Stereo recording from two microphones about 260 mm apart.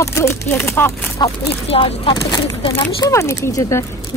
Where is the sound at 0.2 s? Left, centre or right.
Centre.